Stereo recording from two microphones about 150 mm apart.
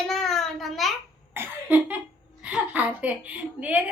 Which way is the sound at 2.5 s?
10° right (ahead or behind).